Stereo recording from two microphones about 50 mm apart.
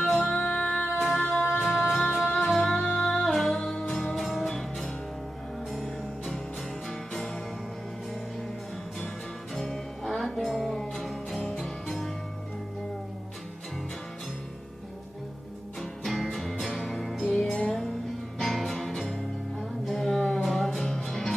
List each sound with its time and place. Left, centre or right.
0.0 s music: centre
0.5 s music: centre
0.9 s music: centre
4.1 s music: centre
9.6 s music: centre
15.8 s music: centre